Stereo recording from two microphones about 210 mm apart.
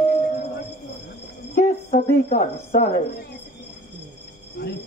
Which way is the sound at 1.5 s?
40° left (ahead or behind).